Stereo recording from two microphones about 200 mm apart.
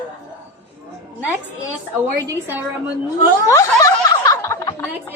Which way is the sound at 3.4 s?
15° left (ahead or behind).